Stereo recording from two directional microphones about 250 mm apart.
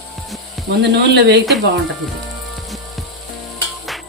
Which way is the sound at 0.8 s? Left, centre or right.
Right.